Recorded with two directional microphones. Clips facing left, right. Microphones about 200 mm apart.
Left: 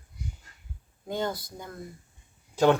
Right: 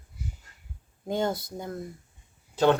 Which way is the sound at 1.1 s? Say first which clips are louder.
Right 3 dB; 25° right (ahead or behind).